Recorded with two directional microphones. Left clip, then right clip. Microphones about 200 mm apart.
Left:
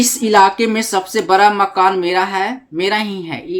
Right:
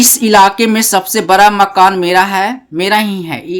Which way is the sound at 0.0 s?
30° right (ahead or behind).